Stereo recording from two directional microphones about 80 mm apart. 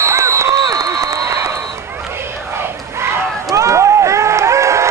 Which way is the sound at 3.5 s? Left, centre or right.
Right.